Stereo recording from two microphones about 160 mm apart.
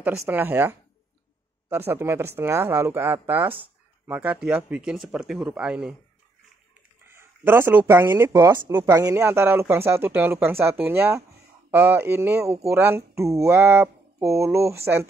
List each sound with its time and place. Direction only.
0.0 s speech: 10° right (ahead or behind)
7.1 s speech: 15° right (ahead or behind)